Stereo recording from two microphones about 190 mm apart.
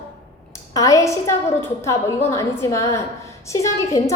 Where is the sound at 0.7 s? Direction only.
15° left (ahead or behind).